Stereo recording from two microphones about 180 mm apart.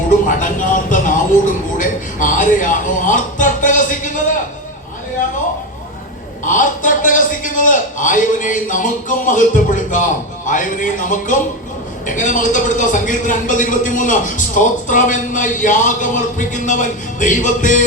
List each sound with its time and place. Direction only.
0.1 s music: 45° left (ahead or behind)
6.4 s a man's voice: 45° left (ahead or behind)